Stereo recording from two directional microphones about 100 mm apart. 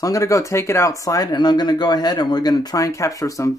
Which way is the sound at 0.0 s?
35° left (ahead or behind).